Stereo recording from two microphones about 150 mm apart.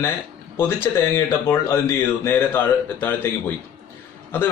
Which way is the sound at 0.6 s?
15° left (ahead or behind).